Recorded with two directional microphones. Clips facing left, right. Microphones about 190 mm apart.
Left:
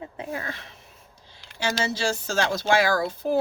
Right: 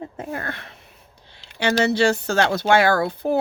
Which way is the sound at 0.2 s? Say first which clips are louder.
Right 2 dB; 55° right (ahead or behind).